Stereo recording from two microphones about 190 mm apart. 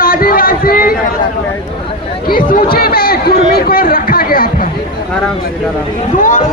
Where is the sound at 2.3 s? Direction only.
50° left (ahead or behind).